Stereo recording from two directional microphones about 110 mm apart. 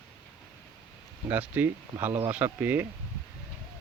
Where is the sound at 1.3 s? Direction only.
15° right (ahead or behind).